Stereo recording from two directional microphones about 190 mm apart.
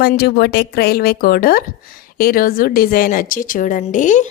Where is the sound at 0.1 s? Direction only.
55° left (ahead or behind).